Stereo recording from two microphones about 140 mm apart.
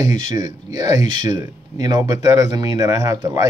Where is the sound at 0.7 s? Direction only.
30° right (ahead or behind).